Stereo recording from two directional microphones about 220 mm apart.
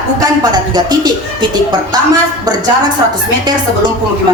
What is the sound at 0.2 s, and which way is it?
A woman's voice, 20° right (ahead or behind).